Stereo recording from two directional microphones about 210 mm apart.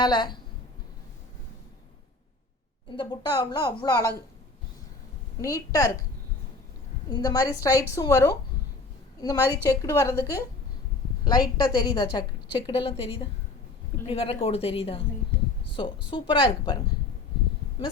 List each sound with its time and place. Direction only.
0.0 s a woman's voice: 20° left (ahead or behind)
2.9 s a woman's voice: 20° left (ahead or behind)
5.4 s a woman's voice: 15° left (ahead or behind)
7.1 s a woman's voice: 15° left (ahead or behind)